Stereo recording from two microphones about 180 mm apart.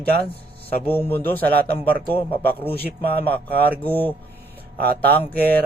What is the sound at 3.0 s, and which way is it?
Speech, 10° left (ahead or behind).